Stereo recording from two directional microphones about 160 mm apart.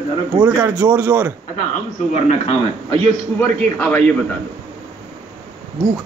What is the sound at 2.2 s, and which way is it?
Speech, 35° left (ahead or behind).